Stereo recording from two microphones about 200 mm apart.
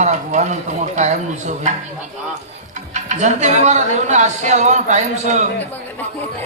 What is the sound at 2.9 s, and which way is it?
Speech, 35° right (ahead or behind).